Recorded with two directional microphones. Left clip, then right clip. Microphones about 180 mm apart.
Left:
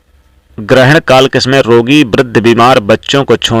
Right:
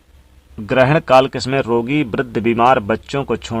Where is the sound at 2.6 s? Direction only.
45° left (ahead or behind).